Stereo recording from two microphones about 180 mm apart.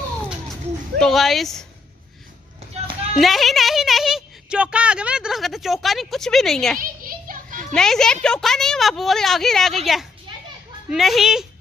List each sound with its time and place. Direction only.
0.9 s a woman's voice: centre (ahead or behind)
2.7 s clip-clop: 35° right (ahead or behind)
3.2 s a woman's voice: centre (ahead or behind)
6.8 s children playing: 50° right (ahead or behind)
7.7 s a woman's voice: 5° left (ahead or behind)